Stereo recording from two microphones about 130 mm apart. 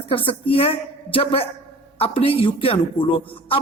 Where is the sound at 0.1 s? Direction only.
45° left (ahead or behind).